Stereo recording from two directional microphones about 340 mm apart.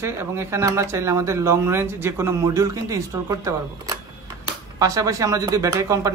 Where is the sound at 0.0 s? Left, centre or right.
Centre.